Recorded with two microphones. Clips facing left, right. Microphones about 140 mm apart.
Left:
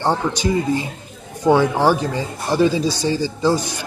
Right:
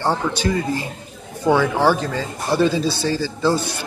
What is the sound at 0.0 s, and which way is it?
Speech, 15° left (ahead or behind).